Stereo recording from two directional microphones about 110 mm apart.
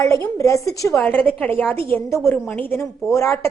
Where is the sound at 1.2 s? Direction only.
15° left (ahead or behind).